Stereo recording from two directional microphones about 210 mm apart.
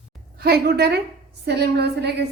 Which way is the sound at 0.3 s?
45° right (ahead or behind).